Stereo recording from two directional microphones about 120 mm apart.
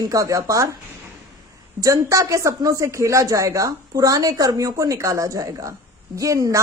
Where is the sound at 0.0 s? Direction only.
30° right (ahead or behind).